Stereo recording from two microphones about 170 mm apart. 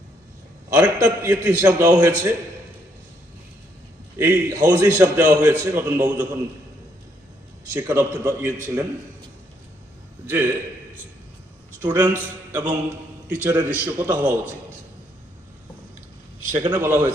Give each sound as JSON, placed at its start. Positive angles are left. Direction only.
{"t": 0.7, "sound": "a man's voice", "side_deg": -15}
{"t": 4.2, "sound": "a man's voice", "side_deg": -15}
{"t": 7.7, "sound": "a man's voice", "side_deg": -15}
{"t": 10.2, "sound": "a man's voice", "side_deg": -10}
{"t": 11.8, "sound": "a man's voice", "side_deg": -10}
{"t": 12.5, "sound": "mantra", "side_deg": -10}
{"t": 13.2, "sound": "a man's voice", "side_deg": -10}
{"t": 16.6, "sound": "a man's voice", "side_deg": -10}